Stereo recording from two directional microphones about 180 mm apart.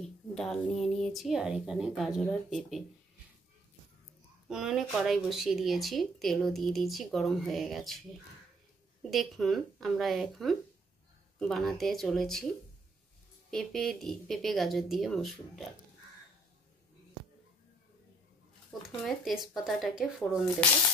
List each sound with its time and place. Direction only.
0.0 s speech: centre (ahead or behind)
4.5 s speech: 5° right (ahead or behind)
9.1 s speech: centre (ahead or behind)
13.5 s speech: centre (ahead or behind)
18.7 s a sound: centre (ahead or behind)
19.0 s speech: centre (ahead or behind)